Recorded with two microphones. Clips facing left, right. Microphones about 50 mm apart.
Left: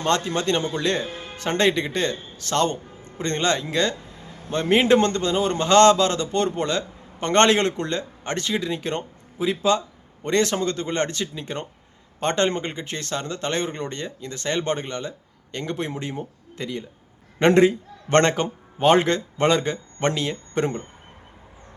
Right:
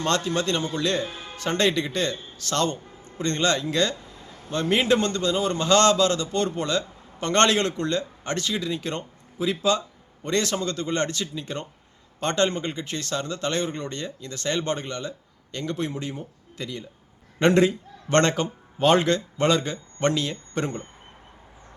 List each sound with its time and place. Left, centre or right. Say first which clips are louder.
0.0 s a man's voice: left 2 dB; left